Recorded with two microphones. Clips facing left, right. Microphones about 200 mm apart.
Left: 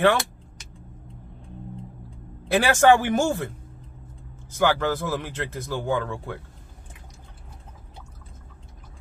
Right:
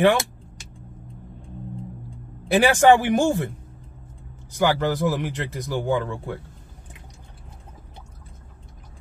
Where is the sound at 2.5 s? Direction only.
15° right (ahead or behind).